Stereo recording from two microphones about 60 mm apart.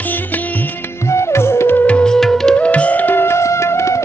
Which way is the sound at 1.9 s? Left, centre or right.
Centre.